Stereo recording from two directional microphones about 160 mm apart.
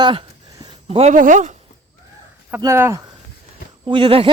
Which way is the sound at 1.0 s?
50° right (ahead or behind).